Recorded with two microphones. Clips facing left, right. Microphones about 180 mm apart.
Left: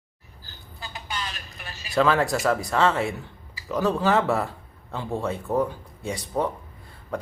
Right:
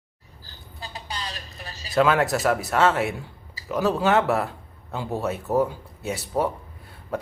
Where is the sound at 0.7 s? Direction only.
35° right (ahead or behind).